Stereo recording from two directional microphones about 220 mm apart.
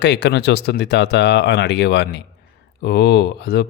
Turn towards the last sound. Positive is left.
turn(degrees=50)  # may be behind; listen again after turning